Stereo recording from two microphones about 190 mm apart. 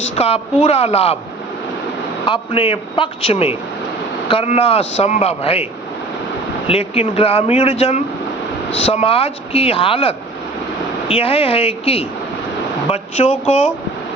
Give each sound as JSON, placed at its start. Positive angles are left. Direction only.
{"t": 0.2, "sound": "speech", "side_deg": 35}
{"t": 2.2, "sound": "speech", "side_deg": 30}
{"t": 6.7, "sound": "speech", "side_deg": 30}